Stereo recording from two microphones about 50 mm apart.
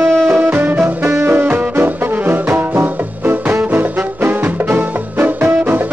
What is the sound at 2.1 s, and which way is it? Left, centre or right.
Brass instrument, right.